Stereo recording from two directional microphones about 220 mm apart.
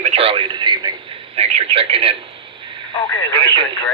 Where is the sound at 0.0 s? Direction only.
25° right (ahead or behind).